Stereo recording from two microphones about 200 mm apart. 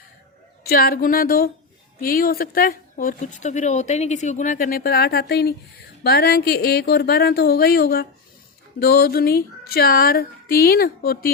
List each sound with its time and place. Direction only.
0.6 s a woman's voice: 50° left (ahead or behind)